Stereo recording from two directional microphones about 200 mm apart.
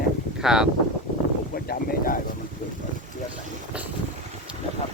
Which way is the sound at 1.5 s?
50° left (ahead or behind).